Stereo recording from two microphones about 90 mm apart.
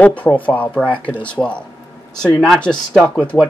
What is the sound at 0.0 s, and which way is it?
Speech, 15° left (ahead or behind).